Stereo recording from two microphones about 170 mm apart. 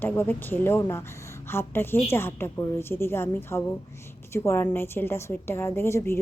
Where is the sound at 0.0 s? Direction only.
10° left (ahead or behind).